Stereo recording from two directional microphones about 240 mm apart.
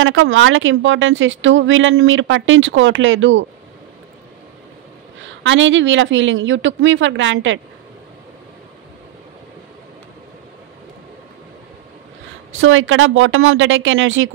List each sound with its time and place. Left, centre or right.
0.0 s speech: right
5.2 s speech: right
12.5 s speech: right